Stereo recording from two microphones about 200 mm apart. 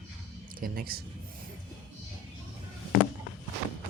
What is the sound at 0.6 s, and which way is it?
Speech, 50° right (ahead or behind).